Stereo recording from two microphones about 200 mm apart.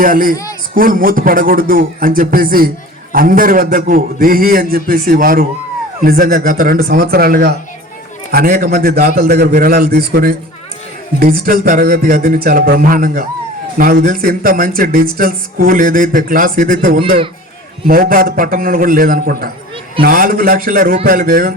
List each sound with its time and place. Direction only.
0.0 s a man's voice: 45° right (ahead or behind)